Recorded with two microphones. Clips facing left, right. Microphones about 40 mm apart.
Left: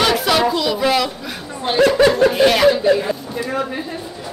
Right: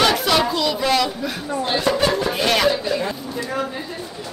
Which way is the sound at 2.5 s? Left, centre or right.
Centre.